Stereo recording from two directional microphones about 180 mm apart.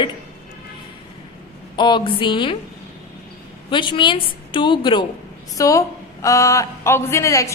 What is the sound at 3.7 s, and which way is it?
A woman's voice, 25° left (ahead or behind).